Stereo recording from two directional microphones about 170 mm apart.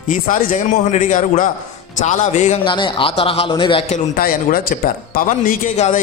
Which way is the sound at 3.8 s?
50° left (ahead or behind).